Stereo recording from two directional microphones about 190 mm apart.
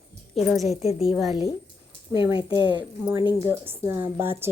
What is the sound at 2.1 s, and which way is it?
A woman's voice, 20° right (ahead or behind).